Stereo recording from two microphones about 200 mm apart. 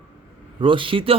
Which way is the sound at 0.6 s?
25° right (ahead or behind).